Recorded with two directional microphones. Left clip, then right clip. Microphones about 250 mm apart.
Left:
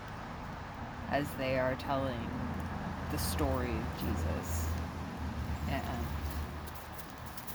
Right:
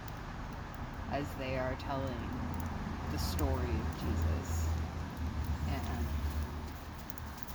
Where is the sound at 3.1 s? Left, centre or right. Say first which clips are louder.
Left 3 dB; left.